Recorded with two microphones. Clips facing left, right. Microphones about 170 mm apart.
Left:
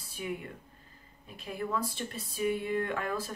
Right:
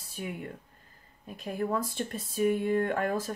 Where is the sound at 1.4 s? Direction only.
45° right (ahead or behind).